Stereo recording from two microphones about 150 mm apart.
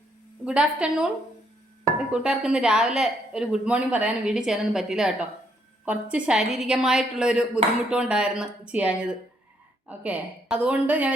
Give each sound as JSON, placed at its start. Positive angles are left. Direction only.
{"t": 0.4, "sound": "a woman's voice", "side_deg": -5}
{"t": 2.2, "sound": "a woman's voice", "side_deg": -5}